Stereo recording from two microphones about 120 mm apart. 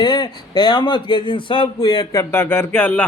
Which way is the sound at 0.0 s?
35° left (ahead or behind).